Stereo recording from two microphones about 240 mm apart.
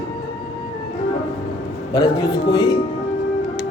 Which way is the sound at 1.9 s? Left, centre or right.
Centre.